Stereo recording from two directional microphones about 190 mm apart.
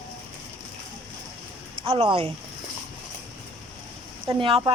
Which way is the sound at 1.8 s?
25° right (ahead or behind).